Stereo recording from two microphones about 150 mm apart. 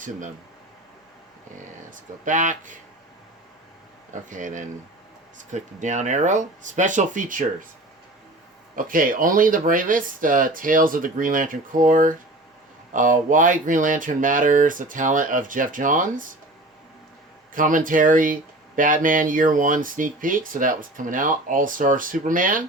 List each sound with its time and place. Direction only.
1.9 s speech: 60° right (ahead or behind)
4.3 s speech: 55° right (ahead or behind)
8.7 s speech: 65° right (ahead or behind)
17.5 s speech: 65° right (ahead or behind)